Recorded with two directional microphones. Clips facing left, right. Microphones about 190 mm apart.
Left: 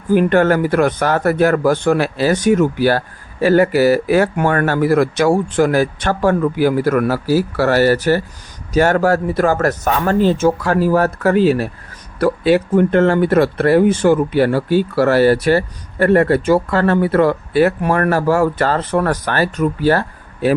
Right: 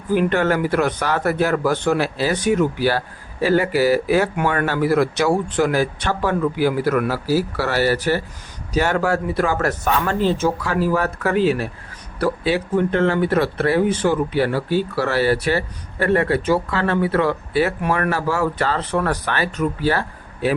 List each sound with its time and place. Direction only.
0.1 s speech: 50° left (ahead or behind)
12.2 s speech: 50° left (ahead or behind)